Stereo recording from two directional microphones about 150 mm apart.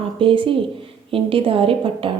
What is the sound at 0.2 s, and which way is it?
Speech, 35° right (ahead or behind).